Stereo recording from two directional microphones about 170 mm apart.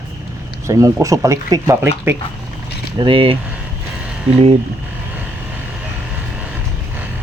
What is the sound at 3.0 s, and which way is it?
Speech, 30° right (ahead or behind).